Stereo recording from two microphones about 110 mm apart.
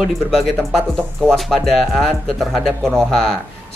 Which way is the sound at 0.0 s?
Centre (ahead or behind).